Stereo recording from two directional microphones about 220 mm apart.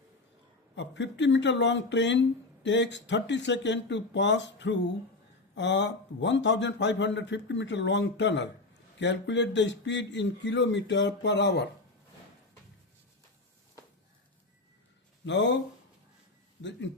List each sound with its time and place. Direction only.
0.8 s a man's voice: 55° left (ahead or behind)
15.3 s a man's voice: 55° left (ahead or behind)